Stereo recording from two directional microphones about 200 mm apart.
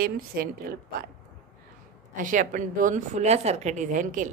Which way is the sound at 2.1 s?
40° right (ahead or behind).